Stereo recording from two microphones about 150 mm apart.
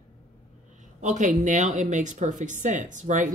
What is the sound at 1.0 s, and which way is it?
Speech, 55° right (ahead or behind).